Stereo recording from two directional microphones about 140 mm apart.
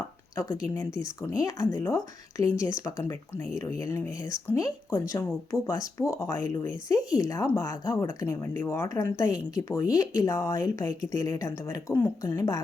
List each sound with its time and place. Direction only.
0.3 s speech: 25° left (ahead or behind)